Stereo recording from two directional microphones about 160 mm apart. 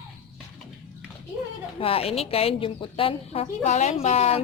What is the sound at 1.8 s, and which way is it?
A woman's voice, 35° left (ahead or behind).